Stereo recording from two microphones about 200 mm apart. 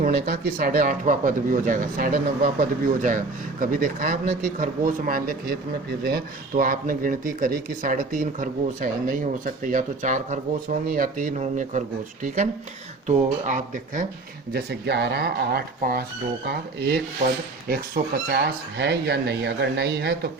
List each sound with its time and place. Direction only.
0.0 s speech: 45° right (ahead or behind)
13.1 s speech: 40° right (ahead or behind)
14.5 s speech: 60° right (ahead or behind)